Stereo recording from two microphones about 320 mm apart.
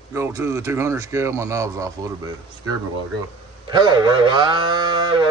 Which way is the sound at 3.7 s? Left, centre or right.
Centre.